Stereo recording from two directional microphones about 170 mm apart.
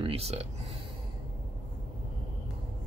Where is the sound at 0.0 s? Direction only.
35° right (ahead or behind).